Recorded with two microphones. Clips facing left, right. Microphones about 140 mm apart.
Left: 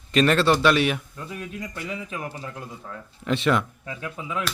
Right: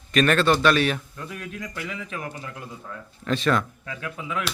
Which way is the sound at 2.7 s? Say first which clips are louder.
Even; 15° left (ahead or behind).